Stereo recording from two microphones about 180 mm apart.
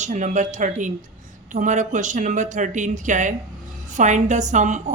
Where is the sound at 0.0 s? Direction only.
40° right (ahead or behind).